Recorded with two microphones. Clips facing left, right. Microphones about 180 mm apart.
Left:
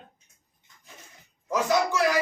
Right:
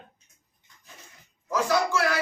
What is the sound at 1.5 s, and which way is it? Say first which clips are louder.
Speech: even; 15° left (ahead or behind).